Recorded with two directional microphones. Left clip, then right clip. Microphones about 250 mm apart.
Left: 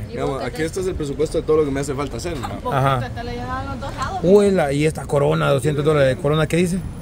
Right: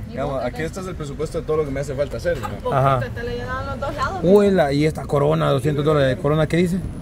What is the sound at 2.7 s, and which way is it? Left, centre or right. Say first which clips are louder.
Speech: right 1 dB; centre.